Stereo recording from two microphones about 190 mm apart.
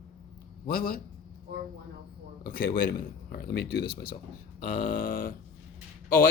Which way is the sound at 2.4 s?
50° left (ahead or behind).